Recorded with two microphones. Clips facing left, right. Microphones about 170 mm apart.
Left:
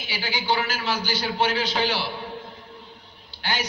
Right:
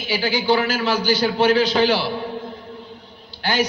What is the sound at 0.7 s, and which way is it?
Speech, 40° right (ahead or behind).